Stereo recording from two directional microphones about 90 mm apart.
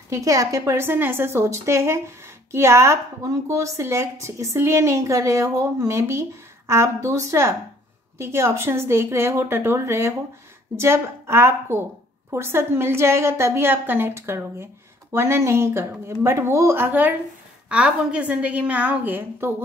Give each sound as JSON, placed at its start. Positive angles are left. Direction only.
{"t": 0.1, "sound": "a woman's voice", "side_deg": -35}